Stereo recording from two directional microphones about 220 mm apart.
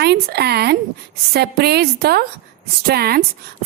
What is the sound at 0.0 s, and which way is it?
A woman's voice, 45° right (ahead or behind).